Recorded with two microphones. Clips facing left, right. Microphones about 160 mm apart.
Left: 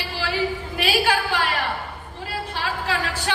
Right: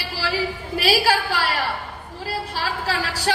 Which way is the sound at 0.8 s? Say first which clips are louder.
Right 2 dB; 40° right (ahead or behind).